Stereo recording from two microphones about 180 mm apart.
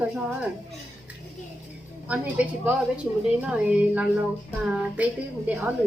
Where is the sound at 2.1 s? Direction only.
10° right (ahead or behind).